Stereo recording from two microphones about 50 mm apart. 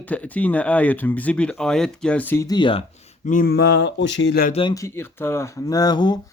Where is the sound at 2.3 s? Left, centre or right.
Left.